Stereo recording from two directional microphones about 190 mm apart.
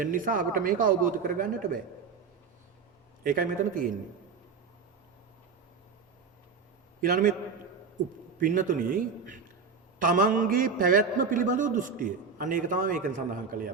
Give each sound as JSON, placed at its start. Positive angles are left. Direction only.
{"t": 0.0, "sound": "a man's voice", "side_deg": -45}
{"t": 3.2, "sound": "a man's voice", "side_deg": -45}
{"t": 7.0, "sound": "a man's voice", "side_deg": -45}
{"t": 8.4, "sound": "a man's voice", "side_deg": -45}